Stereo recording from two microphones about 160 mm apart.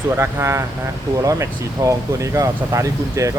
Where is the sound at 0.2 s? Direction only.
15° right (ahead or behind).